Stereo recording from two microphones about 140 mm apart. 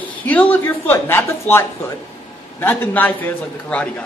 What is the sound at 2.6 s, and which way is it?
A man's voice, 15° left (ahead or behind).